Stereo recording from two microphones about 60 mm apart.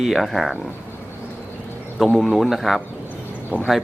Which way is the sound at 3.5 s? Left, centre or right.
Left.